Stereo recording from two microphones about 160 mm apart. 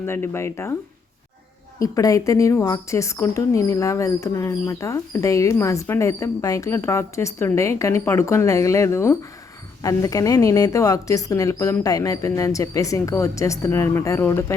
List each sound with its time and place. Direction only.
0.0 s speech: 15° left (ahead or behind)
1.8 s speech: 20° left (ahead or behind)